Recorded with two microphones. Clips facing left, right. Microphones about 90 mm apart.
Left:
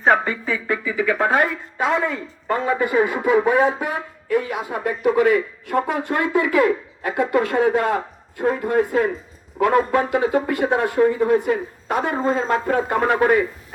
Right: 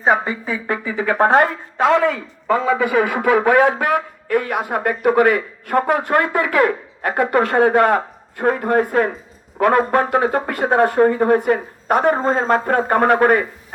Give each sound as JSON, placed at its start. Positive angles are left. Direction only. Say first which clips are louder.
{"t": 0.0, "sound": "a woman's voice", "louder": "even", "side_deg": -5}
{"t": 0.7, "sound": "speech", "louder": "right 1 dB", "side_deg": -45}
{"t": 1.3, "sound": "speech", "louder": "right 5 dB", "side_deg": -55}
{"t": 1.9, "sound": "speech", "louder": "right 5 dB", "side_deg": -90}